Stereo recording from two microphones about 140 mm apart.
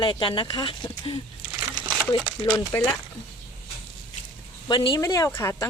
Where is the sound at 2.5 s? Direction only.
10° left (ahead or behind).